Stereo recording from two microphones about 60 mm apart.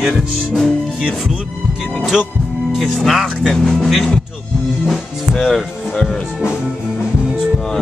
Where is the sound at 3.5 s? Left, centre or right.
Centre.